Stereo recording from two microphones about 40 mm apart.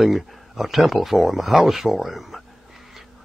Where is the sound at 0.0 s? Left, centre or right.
Centre.